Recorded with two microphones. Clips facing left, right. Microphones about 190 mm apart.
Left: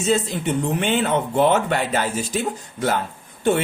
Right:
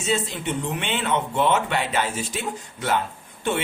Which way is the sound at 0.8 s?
40° left (ahead or behind).